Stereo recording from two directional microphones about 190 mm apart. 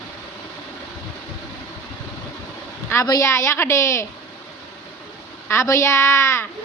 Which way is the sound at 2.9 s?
15° left (ahead or behind).